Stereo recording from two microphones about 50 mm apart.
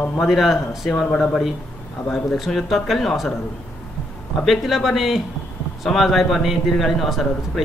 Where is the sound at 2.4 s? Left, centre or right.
Centre.